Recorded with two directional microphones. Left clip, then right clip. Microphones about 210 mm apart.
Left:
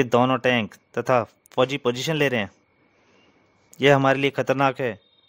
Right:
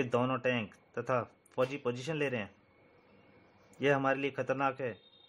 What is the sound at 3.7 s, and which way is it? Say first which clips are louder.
Speech: left 12 dB; 50° left (ahead or behind).